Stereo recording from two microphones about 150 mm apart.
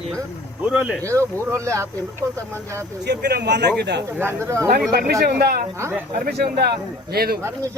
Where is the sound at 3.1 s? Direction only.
90° right.